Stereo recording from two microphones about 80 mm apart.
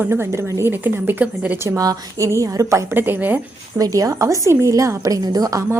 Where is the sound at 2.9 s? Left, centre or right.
Right.